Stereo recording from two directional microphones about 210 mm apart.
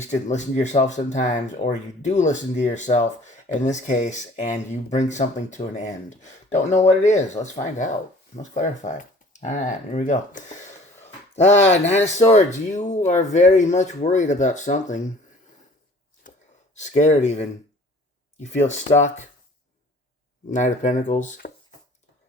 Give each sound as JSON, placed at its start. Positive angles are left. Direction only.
{"t": 0.0, "sound": "speech", "side_deg": 35}
{"t": 16.7, "sound": "speech", "side_deg": 35}
{"t": 20.5, "sound": "speech", "side_deg": 35}